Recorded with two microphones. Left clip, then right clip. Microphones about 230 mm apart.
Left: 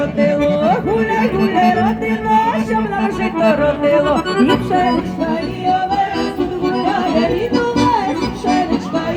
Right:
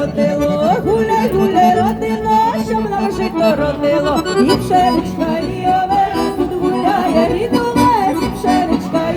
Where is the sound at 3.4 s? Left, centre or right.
Right.